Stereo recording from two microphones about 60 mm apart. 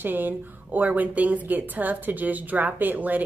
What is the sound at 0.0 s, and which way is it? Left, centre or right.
Speech, right.